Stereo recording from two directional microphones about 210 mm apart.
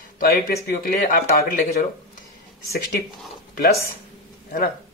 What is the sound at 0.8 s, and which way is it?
Speech, 45° left (ahead or behind).